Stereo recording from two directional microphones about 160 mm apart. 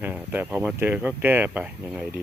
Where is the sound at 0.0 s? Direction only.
10° right (ahead or behind).